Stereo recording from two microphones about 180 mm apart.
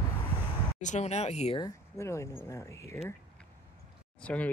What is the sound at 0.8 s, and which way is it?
Speech, 40° left (ahead or behind).